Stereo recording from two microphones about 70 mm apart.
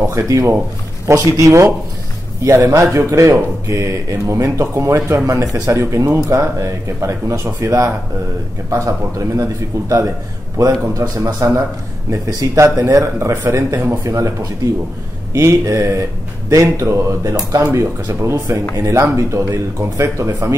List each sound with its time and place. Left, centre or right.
0.0 s speech: right
17.7 s speech: right